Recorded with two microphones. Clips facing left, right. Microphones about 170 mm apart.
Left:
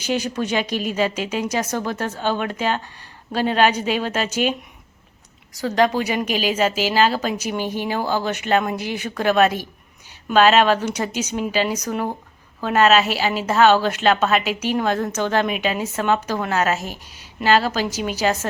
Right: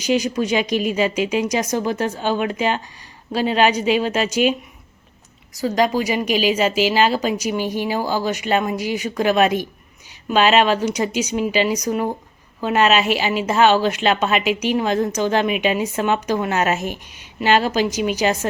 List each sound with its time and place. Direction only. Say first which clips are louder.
0.0 s a woman's voice: right 4 dB; 10° right (ahead or behind)
5.5 s a woman's voice: even; 10° right (ahead or behind)
6.2 s a woman's voice: right 4 dB; 45° left (ahead or behind)
6.5 s a woman's voice: right 2 dB; 10° right (ahead or behind)
14.4 s a woman's voice: right 3 dB; 45° left (ahead or behind)
14.8 s a woman's voice: right 2 dB; 10° right (ahead or behind)
16.9 s speech: right 4 dB; 40° left (ahead or behind)
17.5 s a woman's voice: right 1 dB; 15° right (ahead or behind)